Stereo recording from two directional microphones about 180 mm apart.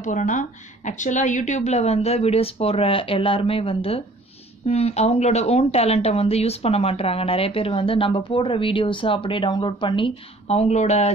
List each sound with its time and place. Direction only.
0.0 s speech: 45° left (ahead or behind)